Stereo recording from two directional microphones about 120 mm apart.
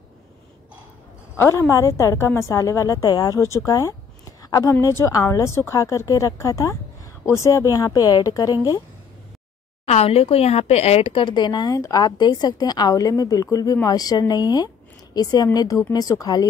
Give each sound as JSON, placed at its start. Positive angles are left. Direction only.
{"t": 1.3, "sound": "a woman's voice", "side_deg": 20}
{"t": 9.8, "sound": "a woman's voice", "side_deg": 60}